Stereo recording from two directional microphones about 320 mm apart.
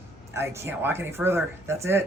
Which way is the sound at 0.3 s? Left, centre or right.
Centre.